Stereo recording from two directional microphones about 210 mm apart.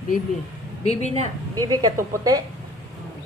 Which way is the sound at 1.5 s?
20° right (ahead or behind).